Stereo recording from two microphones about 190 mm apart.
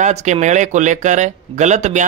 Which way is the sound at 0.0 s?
35° right (ahead or behind).